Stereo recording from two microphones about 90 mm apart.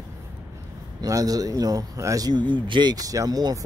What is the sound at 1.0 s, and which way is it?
A man's voice, 45° right (ahead or behind).